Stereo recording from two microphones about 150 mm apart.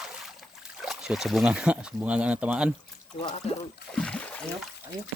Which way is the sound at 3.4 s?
45° left (ahead or behind).